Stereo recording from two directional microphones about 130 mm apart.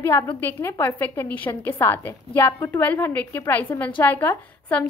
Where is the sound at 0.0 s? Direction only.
15° left (ahead or behind).